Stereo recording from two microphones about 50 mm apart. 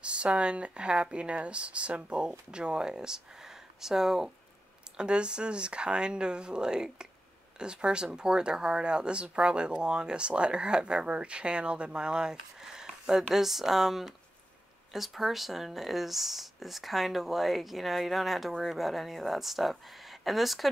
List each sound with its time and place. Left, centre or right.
0.0 s speech: right
4.9 s speech: centre